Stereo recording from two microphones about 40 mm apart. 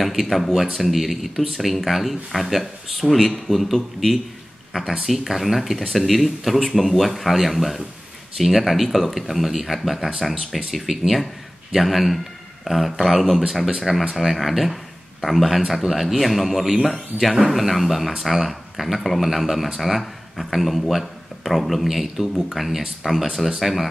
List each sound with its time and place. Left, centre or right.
0.0 s speech: centre